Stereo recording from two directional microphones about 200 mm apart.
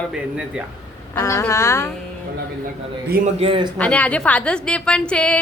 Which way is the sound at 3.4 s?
25° right (ahead or behind).